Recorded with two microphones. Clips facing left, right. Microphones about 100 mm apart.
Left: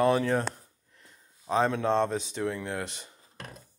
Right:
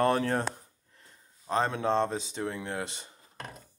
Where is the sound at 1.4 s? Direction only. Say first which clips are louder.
Left 3 dB; 5° left (ahead or behind).